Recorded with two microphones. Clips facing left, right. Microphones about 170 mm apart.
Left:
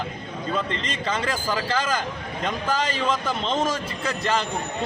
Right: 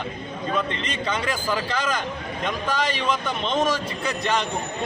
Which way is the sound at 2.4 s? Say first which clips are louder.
Even; 30° left (ahead or behind).